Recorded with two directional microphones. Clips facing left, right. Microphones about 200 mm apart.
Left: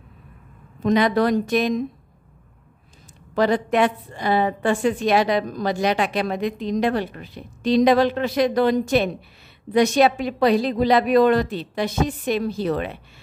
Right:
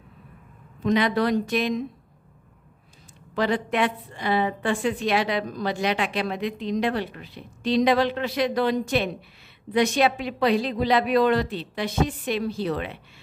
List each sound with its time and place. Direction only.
0.8 s a woman's voice: 45° left (ahead or behind)
3.3 s a woman's voice: 45° left (ahead or behind)